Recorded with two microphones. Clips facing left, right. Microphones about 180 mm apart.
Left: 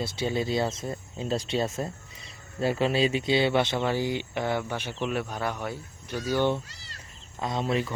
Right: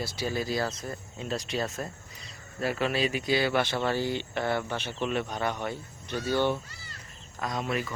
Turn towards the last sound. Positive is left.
turn(degrees=25)  # may be behind; listen again after turning